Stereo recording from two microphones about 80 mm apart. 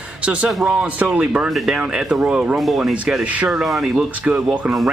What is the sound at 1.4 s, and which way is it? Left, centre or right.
Speech, centre.